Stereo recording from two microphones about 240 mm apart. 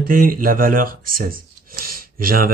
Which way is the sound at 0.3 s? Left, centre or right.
Right.